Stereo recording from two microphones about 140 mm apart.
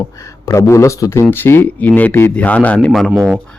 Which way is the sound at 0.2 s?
20° left (ahead or behind).